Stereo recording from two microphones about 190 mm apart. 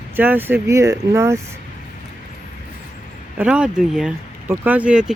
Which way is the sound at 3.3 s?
5° right (ahead or behind).